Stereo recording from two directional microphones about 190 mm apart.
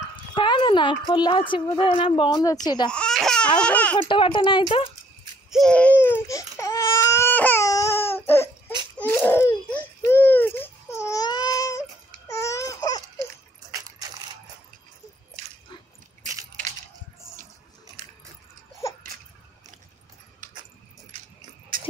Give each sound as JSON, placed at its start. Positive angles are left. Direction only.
{"t": 0.1, "sound": "dog", "side_deg": 25}
{"t": 1.5, "sound": "speech", "side_deg": 25}
{"t": 2.9, "sound": "speech", "side_deg": 5}
{"t": 4.1, "sound": "speech", "side_deg": 25}
{"t": 5.5, "sound": "baby cry", "side_deg": 5}
{"t": 8.9, "sound": "a sound", "side_deg": 10}
{"t": 12.3, "sound": "baby cry", "side_deg": 15}
{"t": 13.7, "sound": "keys jangling", "side_deg": -15}
{"t": 21.7, "sound": "cowbell", "side_deg": -45}